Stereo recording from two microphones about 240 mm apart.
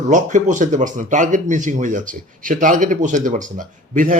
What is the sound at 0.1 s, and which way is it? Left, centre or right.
Speech, right.